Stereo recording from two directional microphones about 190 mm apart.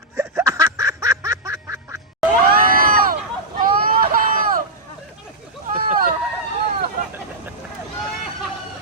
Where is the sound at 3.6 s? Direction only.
45° right (ahead or behind).